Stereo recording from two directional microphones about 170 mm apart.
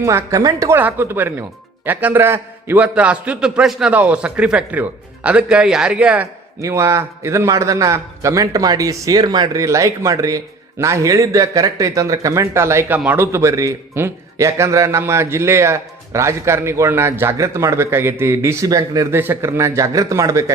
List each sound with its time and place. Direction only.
0.0 s a man's voice: 15° right (ahead or behind)
6.6 s a man's voice: 15° right (ahead or behind)